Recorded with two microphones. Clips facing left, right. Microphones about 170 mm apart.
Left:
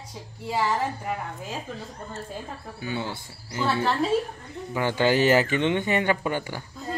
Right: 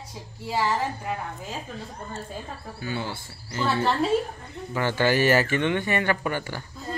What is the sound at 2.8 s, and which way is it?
Speech, 15° left (ahead or behind).